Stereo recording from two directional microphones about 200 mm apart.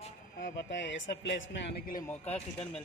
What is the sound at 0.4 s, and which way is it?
Speech, 65° left (ahead or behind).